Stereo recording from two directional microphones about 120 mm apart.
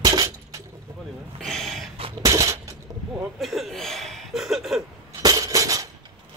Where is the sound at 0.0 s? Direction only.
30° right (ahead or behind).